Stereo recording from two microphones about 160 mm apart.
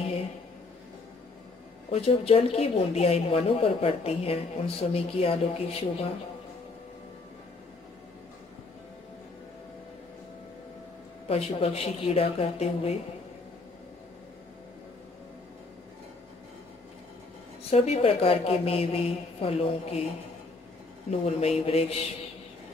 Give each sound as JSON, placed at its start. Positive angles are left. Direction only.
{"t": 1.9, "sound": "a woman's voice", "side_deg": 40}
{"t": 11.2, "sound": "a woman's voice", "side_deg": 40}
{"t": 17.6, "sound": "a woman's voice", "side_deg": 40}
{"t": 21.1, "sound": "a woman's voice", "side_deg": 40}